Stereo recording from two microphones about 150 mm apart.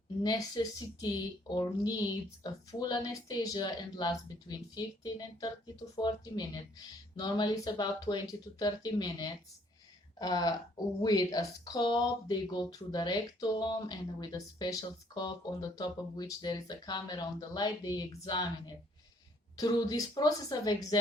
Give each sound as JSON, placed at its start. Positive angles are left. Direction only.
{"t": 0.2, "sound": "speech", "side_deg": 25}
{"t": 19.5, "sound": "speech", "side_deg": 25}